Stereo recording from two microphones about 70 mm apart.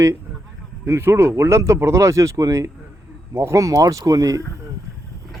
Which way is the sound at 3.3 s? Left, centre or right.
Right.